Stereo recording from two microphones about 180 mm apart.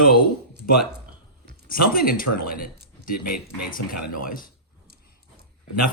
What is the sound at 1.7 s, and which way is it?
Speech, 55° left (ahead or behind).